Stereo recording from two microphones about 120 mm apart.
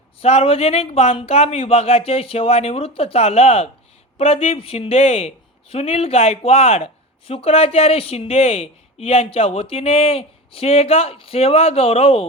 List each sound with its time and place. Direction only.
0.2 s speech: 55° left (ahead or behind)